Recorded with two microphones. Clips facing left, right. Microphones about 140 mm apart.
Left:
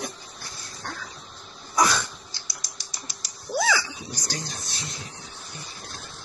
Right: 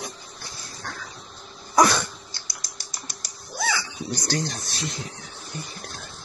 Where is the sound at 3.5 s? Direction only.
90° left.